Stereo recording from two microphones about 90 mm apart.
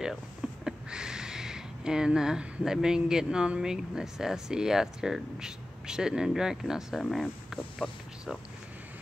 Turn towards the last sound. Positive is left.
turn(degrees=0)  # may be behind; listen again after turning